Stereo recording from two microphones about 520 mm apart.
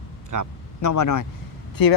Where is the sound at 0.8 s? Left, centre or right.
Left.